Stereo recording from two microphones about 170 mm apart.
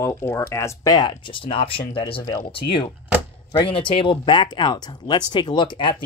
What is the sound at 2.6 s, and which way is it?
Speech, 65° left (ahead or behind).